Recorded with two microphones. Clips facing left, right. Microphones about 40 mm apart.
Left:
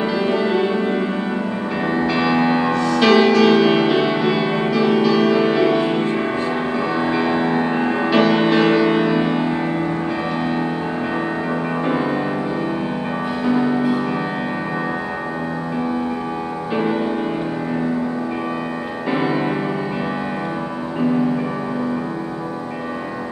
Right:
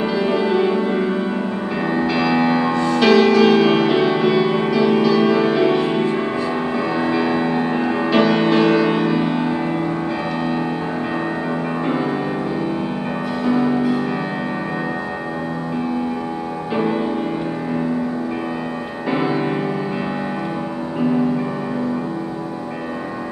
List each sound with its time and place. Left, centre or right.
0.0 s music: centre
2.7 s music: right
3.0 s music: centre
13.5 s music: centre
16.7 s music: centre
19.0 s music: centre